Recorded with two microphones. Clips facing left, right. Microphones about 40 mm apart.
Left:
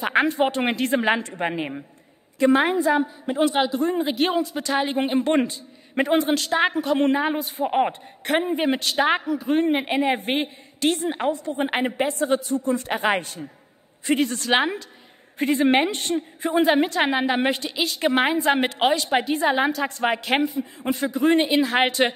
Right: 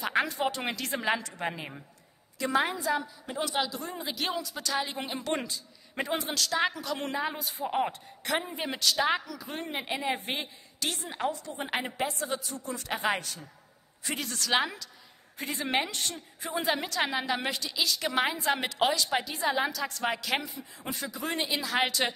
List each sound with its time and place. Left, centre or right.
0.0 s a man's voice: left